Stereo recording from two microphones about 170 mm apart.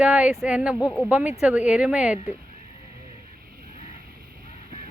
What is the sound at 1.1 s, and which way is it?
Speech, 10° right (ahead or behind).